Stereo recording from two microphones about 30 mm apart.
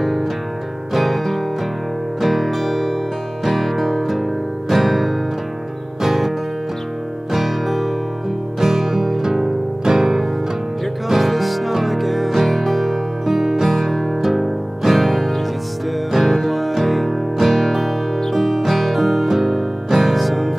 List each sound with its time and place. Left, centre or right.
0.0 s music: centre
7.3 s music: centre
8.5 s music: centre
11.1 s music: centre